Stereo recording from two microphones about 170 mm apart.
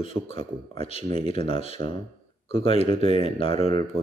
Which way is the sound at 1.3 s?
35° left (ahead or behind).